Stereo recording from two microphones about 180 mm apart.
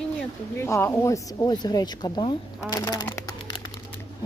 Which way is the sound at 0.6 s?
15° left (ahead or behind).